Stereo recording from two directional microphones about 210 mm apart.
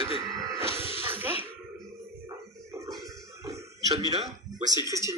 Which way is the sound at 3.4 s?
15° right (ahead or behind).